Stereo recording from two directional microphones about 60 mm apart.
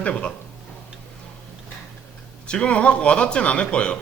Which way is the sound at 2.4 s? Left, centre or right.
Centre.